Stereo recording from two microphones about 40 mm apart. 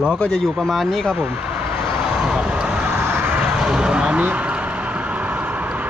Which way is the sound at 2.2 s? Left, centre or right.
Right.